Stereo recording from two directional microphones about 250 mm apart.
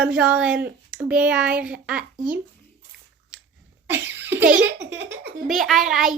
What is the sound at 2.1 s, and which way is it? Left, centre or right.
Speech, right.